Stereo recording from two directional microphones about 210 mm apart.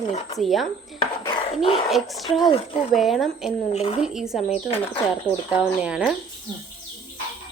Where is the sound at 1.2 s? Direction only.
25° left (ahead or behind).